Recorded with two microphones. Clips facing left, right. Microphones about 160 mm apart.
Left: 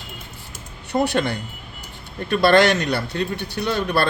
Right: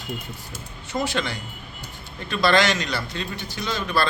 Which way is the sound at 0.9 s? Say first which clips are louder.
Left 6 dB; 60° left (ahead or behind).